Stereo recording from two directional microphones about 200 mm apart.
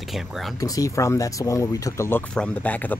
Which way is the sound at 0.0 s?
Centre (ahead or behind).